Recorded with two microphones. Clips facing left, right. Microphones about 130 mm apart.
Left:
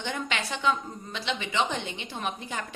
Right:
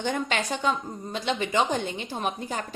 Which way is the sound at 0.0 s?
45° right (ahead or behind).